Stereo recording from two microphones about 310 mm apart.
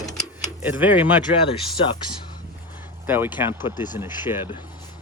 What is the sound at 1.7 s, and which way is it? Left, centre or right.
Speech, centre.